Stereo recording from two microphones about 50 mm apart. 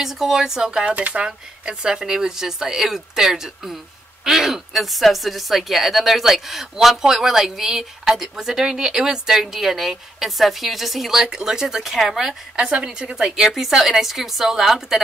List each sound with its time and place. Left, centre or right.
0.0 s speech: centre
12.5 s speech: centre
13.2 s a woman's voice: centre